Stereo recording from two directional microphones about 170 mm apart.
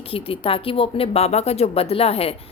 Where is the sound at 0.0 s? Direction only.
35° left (ahead or behind).